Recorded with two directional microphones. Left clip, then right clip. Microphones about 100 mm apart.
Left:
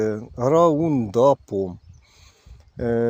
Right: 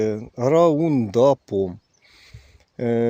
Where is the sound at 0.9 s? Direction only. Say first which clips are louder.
Even; 40° right (ahead or behind).